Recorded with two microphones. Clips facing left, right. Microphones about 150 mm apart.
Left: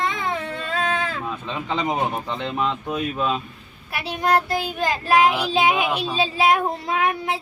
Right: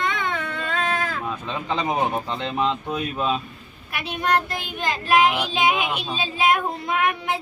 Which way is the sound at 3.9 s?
35° left (ahead or behind).